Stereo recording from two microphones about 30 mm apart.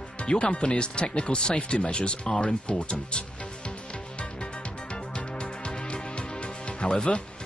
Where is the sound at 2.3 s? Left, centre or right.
Left.